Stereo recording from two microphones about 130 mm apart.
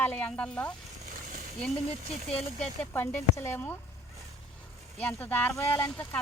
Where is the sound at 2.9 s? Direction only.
20° left (ahead or behind).